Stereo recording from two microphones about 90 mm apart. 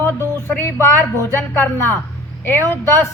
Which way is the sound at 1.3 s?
25° left (ahead or behind).